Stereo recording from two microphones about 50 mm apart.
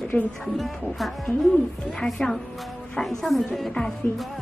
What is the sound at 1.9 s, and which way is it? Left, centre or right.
Speech, centre.